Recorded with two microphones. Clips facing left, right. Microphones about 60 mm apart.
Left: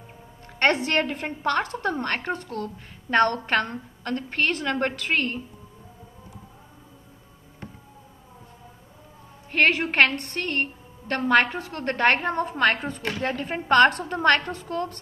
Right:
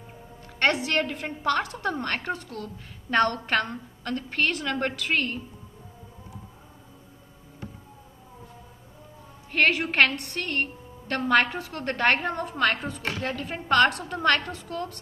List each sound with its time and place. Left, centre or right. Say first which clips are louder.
0.6 s a woman's voice: left 2 dB; left
1.0 s a woman's voice: left 1 dB; left
1.9 s a woman's voice: left 2 dB; centre
9.5 s a woman's voice: left 2 dB; left